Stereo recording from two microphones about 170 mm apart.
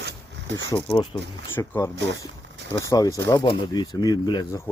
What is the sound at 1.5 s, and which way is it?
Speech, 15° left (ahead or behind).